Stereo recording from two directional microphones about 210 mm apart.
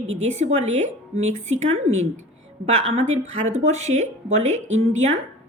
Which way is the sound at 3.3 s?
35° right (ahead or behind).